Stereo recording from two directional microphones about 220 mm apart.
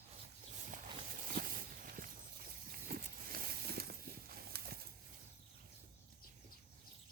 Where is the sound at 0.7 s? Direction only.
35° right (ahead or behind).